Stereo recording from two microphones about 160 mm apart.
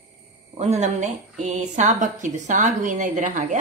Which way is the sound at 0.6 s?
45° right (ahead or behind).